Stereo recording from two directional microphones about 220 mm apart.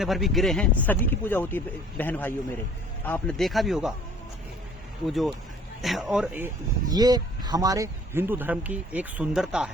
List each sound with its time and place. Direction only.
0.0 s speech: centre (ahead or behind)
5.0 s speech: centre (ahead or behind)